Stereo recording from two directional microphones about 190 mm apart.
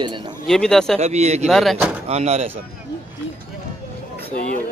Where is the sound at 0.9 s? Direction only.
35° right (ahead or behind).